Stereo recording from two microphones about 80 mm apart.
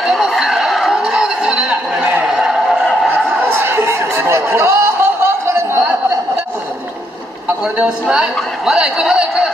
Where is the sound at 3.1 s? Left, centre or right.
Right.